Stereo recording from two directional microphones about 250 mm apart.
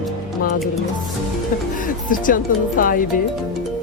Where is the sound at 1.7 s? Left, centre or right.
Left.